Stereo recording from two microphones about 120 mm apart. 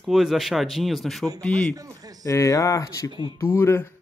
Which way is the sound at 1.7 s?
30° right (ahead or behind).